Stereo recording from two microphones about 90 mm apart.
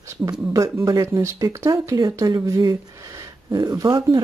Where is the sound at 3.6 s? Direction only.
50° right (ahead or behind).